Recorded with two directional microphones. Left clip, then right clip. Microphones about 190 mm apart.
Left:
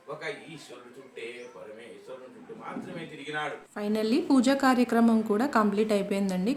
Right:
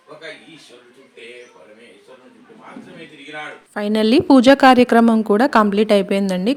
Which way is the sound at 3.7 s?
40° right (ahead or behind).